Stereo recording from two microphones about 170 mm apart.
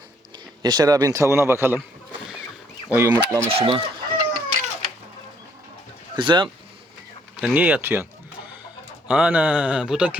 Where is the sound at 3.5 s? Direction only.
35° right (ahead or behind).